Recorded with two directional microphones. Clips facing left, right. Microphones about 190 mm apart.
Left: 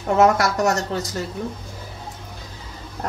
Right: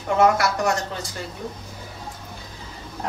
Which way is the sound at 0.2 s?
45° left (ahead or behind).